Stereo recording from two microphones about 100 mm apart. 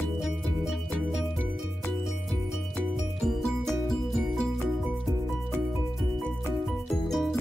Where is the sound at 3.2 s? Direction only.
5° left (ahead or behind).